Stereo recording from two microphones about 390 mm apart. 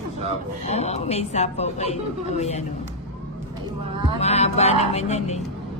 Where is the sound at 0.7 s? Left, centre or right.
Centre.